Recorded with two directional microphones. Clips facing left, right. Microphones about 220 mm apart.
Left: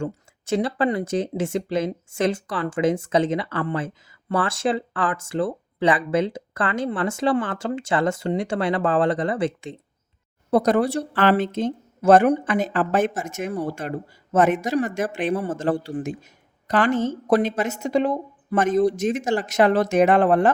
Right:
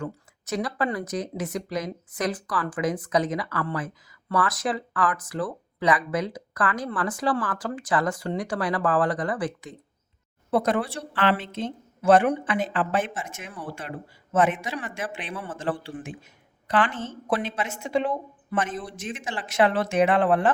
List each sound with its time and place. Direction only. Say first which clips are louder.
0.0 s speech: left 5 dB; 30° left (ahead or behind)
10.5 s a woman's voice: left 5 dB; 40° left (ahead or behind)